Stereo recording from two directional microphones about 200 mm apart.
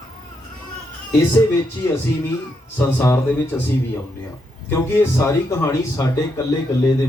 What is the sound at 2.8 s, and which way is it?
Speech, 15° left (ahead or behind).